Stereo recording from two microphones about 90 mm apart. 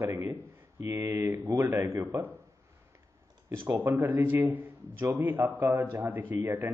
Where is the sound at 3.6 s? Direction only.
35° right (ahead or behind).